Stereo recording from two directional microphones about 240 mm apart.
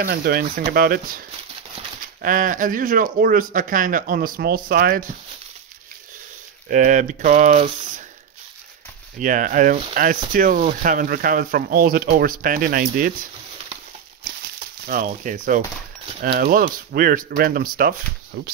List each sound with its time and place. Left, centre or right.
0.0 s speech: right
2.2 s speech: right
6.7 s speech: right
9.2 s speech: right
14.9 s speech: right